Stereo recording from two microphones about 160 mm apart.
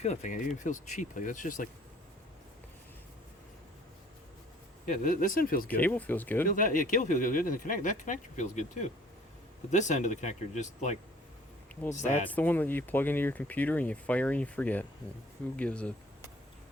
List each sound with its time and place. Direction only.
0.0 s speech: 45° left (ahead or behind)
4.9 s speech: 55° left (ahead or behind)
5.6 s speech: 10° left (ahead or behind)
6.4 s speech: 60° left (ahead or behind)
12.3 s speech: 10° left (ahead or behind)